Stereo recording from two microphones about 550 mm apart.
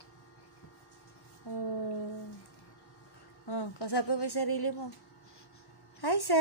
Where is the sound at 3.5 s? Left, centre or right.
Left.